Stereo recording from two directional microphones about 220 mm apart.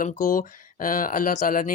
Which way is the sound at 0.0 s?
35° left (ahead or behind).